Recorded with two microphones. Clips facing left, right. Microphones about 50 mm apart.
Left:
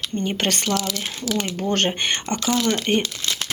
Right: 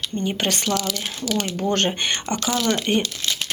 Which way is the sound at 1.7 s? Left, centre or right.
Left.